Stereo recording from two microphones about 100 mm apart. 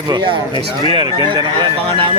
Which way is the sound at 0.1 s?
50° right (ahead or behind).